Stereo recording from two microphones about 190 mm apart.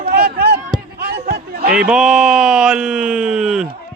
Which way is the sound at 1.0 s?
55° right (ahead or behind).